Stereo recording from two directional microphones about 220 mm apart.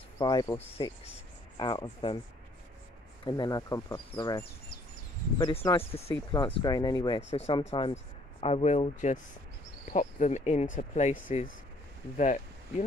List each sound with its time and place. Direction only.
0.2 s speech: 20° left (ahead or behind)
3.3 s speech: 20° left (ahead or behind)
5.8 s speech: 25° left (ahead or behind)
7.2 s speech: 25° left (ahead or behind)